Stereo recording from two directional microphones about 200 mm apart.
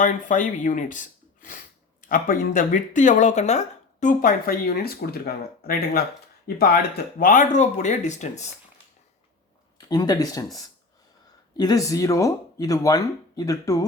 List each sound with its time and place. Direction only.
0.0 s speech: 40° left (ahead or behind)
9.7 s speech: 20° left (ahead or behind)